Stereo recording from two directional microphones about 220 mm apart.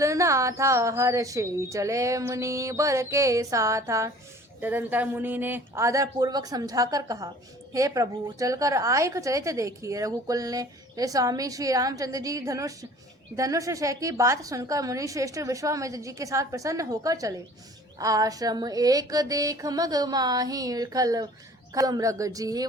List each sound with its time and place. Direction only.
0.0 s a woman's voice: 15° right (ahead or behind)